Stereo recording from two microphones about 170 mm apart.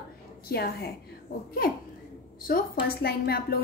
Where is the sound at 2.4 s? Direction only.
60° left (ahead or behind).